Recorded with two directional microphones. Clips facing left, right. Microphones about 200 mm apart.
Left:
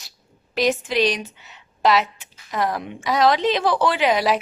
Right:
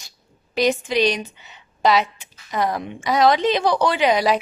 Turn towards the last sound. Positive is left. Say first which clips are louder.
# right 1 dB
turn(degrees=0)  # may be behind; listen again after turning